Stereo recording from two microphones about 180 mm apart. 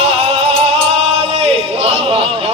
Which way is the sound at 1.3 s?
35° right (ahead or behind).